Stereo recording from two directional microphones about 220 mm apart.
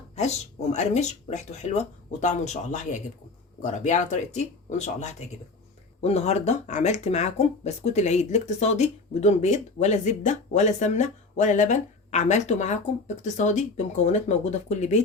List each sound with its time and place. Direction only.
0.2 s speech: 30° left (ahead or behind)